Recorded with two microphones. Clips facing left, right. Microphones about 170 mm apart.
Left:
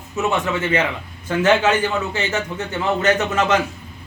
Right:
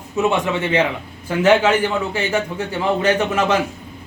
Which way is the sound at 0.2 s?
15° right (ahead or behind).